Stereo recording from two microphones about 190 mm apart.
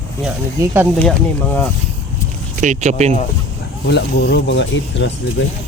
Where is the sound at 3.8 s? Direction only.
60° left (ahead or behind).